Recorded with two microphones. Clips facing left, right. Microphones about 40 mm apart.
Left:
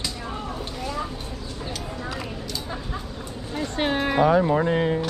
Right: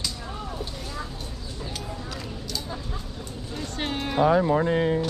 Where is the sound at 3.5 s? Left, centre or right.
Left.